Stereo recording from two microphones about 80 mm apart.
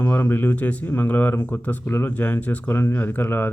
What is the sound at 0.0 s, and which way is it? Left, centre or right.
Speech, left.